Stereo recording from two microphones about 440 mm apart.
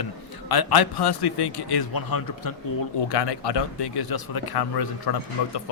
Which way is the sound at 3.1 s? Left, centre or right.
Left.